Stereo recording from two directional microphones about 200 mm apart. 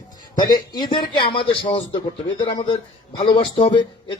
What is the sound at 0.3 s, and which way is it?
A man's voice, 20° left (ahead or behind).